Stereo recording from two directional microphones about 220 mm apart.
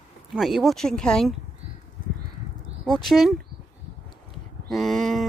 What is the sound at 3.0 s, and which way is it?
Speech, centre (ahead or behind).